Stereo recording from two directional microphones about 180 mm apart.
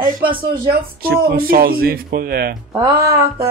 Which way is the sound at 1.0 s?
55° right (ahead or behind).